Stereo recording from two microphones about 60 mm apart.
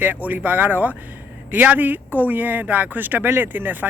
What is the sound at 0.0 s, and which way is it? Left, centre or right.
Speech, right.